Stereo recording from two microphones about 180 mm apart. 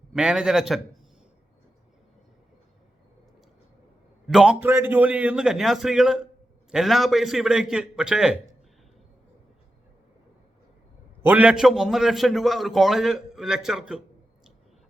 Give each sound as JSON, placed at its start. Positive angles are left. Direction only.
{"t": 0.1, "sound": "a man's voice", "side_deg": -5}
{"t": 4.3, "sound": "a man's voice", "side_deg": -5}
{"t": 11.2, "sound": "a man's voice", "side_deg": -10}